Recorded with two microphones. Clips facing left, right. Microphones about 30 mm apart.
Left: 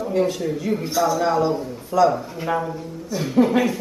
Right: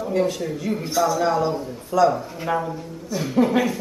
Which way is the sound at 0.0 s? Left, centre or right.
Centre.